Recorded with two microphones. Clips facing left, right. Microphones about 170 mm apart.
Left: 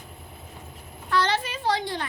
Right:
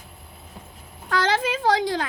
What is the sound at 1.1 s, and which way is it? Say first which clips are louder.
Speech: right 3 dB; 90° right.